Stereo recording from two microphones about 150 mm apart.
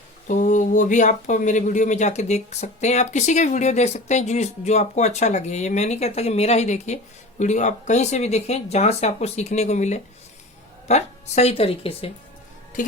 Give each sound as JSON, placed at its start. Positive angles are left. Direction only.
{"t": 0.3, "sound": "speech", "side_deg": 55}